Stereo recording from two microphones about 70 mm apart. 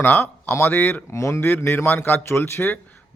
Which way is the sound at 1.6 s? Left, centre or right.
Left.